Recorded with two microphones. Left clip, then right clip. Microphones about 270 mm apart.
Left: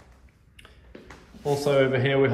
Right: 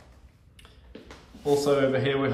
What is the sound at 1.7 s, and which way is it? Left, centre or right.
Speech, right.